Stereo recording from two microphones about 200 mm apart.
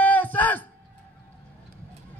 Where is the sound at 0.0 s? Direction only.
10° left (ahead or behind).